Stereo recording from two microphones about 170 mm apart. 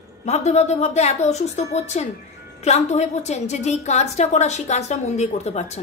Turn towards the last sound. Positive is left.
turn(degrees=40)  # may be behind; listen again after turning